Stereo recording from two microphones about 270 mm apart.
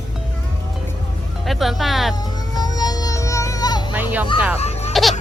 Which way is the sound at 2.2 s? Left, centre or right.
Centre.